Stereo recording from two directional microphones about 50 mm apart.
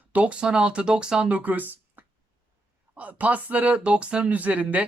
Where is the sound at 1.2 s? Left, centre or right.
Right.